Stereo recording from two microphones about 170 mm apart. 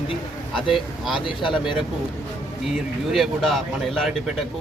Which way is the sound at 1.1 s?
30° left (ahead or behind).